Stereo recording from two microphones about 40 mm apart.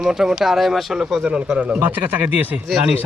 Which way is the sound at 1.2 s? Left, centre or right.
Right.